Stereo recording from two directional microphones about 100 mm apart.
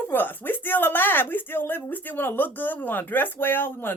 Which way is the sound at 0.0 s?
20° left (ahead or behind).